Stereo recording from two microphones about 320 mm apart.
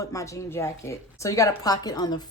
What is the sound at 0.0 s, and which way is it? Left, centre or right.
A woman's voice, centre.